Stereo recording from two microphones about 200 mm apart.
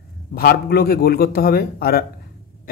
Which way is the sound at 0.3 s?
50° left (ahead or behind).